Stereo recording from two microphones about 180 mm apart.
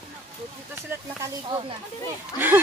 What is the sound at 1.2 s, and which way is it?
Speech, 25° right (ahead or behind).